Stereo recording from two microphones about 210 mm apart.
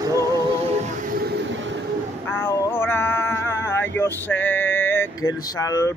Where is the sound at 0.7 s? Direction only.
40° right (ahead or behind).